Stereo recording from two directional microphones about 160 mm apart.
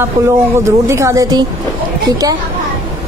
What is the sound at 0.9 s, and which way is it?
Speech, 20° right (ahead or behind).